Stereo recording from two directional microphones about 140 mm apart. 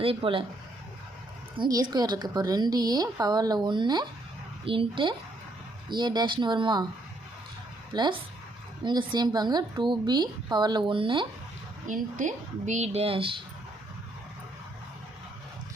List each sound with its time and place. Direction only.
0.0 s speech: 40° right (ahead or behind)
1.7 s a woman's voice: 30° right (ahead or behind)
7.9 s speech: 30° right (ahead or behind)
11.9 s speech: 65° right (ahead or behind); by 13.3 s 40° right (ahead or behind)